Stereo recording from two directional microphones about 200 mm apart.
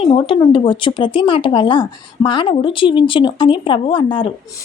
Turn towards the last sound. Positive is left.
turn(degrees=25)  # may be behind; listen again after turning